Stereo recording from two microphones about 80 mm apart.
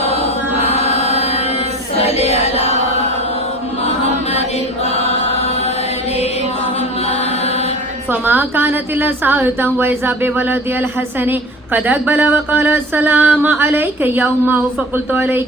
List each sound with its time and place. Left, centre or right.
8.1 s a woman's voice: right